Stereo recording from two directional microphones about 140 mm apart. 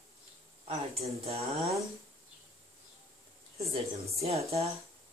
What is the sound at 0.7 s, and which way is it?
Speech, 45° right (ahead or behind).